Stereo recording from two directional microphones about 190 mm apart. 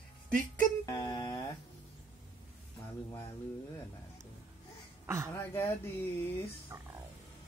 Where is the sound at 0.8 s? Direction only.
20° left (ahead or behind).